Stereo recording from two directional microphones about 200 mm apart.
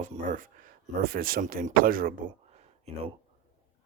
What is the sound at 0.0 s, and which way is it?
Speech, 40° right (ahead or behind).